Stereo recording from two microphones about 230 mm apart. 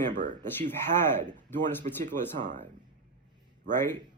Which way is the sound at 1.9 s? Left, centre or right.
Right.